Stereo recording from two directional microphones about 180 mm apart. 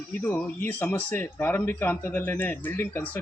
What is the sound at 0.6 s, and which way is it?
Speech, 10° left (ahead or behind).